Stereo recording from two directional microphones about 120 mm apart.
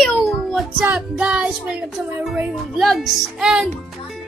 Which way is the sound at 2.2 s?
5° right (ahead or behind).